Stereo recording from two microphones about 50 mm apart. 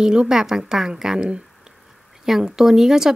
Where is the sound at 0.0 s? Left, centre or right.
Centre.